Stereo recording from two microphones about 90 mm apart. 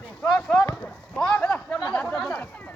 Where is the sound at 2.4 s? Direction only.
15° left (ahead or behind).